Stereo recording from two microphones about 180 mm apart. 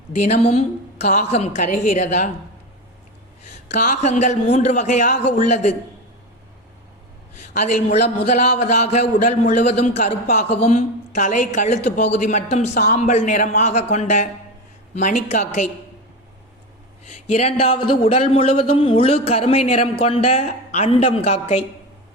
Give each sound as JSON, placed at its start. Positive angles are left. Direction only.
{"t": 0.2, "sound": "a woman's voice", "side_deg": 35}
{"t": 3.7, "sound": "speech", "side_deg": 40}
{"t": 7.5, "sound": "a man's voice", "side_deg": 45}
{"t": 17.1, "sound": "speech", "side_deg": 35}